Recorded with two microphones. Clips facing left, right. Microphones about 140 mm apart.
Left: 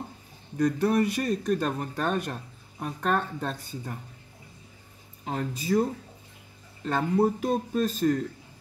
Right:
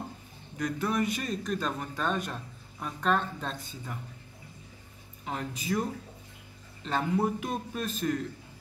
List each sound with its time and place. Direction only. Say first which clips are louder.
0.6 s speech: left 6 dB; 45° left (ahead or behind)
5.2 s speech: left 4 dB; 40° left (ahead or behind)
6.8 s speech: left 3 dB; 50° left (ahead or behind)
7.2 s speech: left 5 dB; 30° left (ahead or behind)